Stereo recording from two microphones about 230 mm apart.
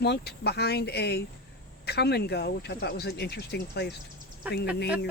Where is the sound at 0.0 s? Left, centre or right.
Left.